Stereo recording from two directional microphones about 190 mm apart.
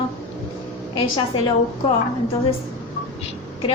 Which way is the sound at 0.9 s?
25° left (ahead or behind).